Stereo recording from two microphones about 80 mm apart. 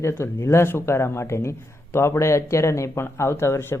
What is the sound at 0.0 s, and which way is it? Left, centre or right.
Speech, left.